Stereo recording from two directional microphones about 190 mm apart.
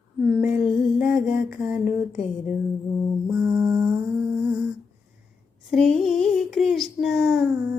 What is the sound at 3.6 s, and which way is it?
Humming, 15° right (ahead or behind).